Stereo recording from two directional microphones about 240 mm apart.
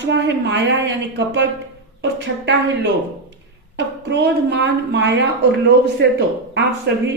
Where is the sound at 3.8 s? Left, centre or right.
Right.